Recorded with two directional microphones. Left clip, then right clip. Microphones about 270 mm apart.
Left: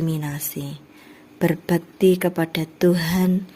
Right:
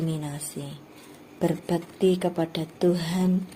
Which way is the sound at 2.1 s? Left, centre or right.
Left.